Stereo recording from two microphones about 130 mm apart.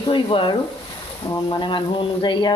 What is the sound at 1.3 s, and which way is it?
Speech, 25° left (ahead or behind).